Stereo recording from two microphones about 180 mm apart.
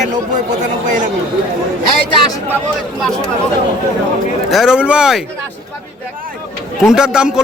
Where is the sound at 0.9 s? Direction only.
45° right (ahead or behind).